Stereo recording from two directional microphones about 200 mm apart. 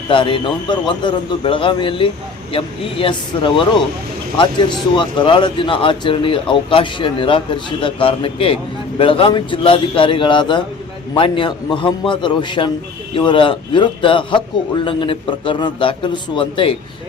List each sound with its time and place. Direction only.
0.1 s speech: 25° left (ahead or behind)